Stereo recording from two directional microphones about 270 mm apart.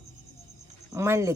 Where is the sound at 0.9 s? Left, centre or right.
Centre.